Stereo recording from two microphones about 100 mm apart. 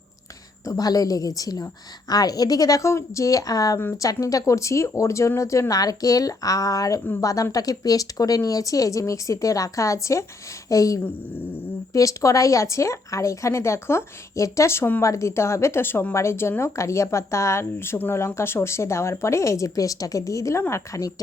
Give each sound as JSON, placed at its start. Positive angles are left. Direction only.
{"t": 0.6, "sound": "a woman's voice", "side_deg": 35}